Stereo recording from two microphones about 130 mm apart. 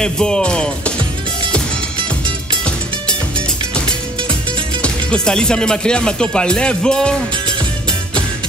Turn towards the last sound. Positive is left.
turn(degrees=5)  # may be behind; listen again after turning